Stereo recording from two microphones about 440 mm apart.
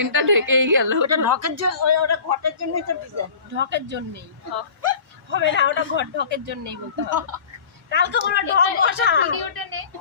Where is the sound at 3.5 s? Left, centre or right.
Right.